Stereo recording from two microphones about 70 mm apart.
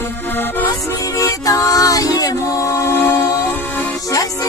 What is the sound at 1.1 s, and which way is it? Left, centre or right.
Music, left.